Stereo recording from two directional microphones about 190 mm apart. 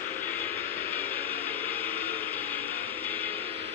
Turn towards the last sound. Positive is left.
turn(degrees=-30)  # may be behind; listen again after turning